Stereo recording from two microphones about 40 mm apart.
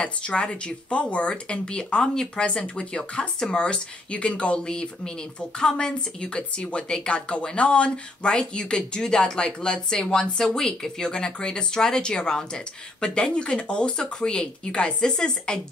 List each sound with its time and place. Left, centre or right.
0.0 s speech: left